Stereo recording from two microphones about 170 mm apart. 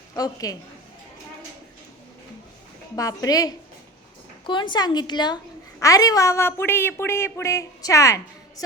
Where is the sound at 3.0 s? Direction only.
20° left (ahead or behind).